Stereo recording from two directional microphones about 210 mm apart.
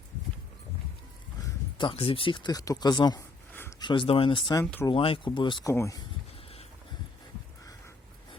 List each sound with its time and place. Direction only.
1.8 s speech: 25° left (ahead or behind)
4.6 s speech: 5° left (ahead or behind)
4.9 s speech: 25° left (ahead or behind)